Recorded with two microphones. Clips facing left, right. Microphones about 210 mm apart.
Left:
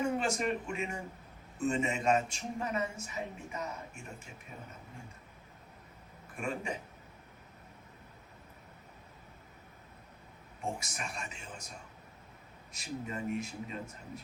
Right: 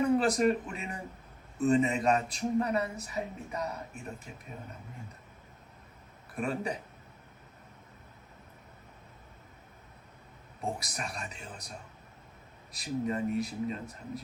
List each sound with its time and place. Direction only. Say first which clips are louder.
0.2 s speech: right 6 dB; 35° right (ahead or behind)
6.3 s speech: right 4 dB; 35° right (ahead or behind)
10.8 s speech: right 3 dB; 35° right (ahead or behind)
12.7 s speech: right 7 dB; 35° right (ahead or behind)